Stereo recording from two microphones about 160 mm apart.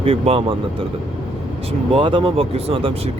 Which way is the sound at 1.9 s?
30° right (ahead or behind).